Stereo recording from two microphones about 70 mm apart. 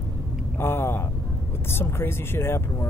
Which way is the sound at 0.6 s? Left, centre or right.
Left.